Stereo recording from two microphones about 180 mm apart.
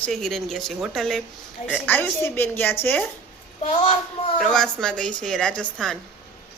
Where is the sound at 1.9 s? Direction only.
15° left (ahead or behind).